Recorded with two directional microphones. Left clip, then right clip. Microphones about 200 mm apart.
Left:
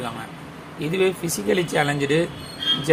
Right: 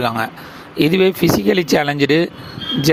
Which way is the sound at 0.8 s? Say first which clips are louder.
Right 8 dB; 45° right (ahead or behind).